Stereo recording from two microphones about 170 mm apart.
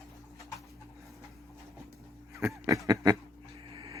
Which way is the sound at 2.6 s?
20° right (ahead or behind).